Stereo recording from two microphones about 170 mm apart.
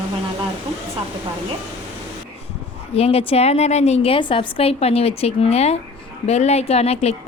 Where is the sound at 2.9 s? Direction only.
35° left (ahead or behind).